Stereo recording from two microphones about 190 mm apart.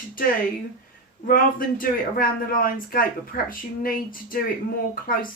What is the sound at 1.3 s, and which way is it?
A man's voice, 50° left (ahead or behind).